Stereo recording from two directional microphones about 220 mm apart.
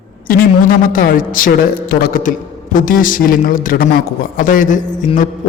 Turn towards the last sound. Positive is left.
turn(degrees=35)  # may be behind; listen again after turning